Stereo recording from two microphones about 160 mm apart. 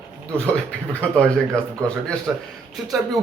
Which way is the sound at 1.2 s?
5° left (ahead or behind).